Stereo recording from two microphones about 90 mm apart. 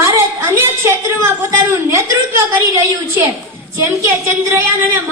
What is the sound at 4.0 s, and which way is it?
Speech, 25° right (ahead or behind).